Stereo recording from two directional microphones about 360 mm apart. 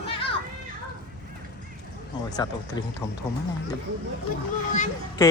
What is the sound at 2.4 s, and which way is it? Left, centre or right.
Speech, centre.